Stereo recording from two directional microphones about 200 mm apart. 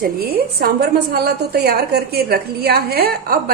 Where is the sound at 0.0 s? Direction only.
50° right (ahead or behind).